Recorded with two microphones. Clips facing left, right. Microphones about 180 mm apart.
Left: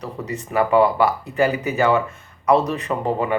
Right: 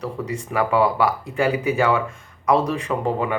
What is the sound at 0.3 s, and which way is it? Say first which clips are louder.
Speech: left 4 dB; 10° right (ahead or behind).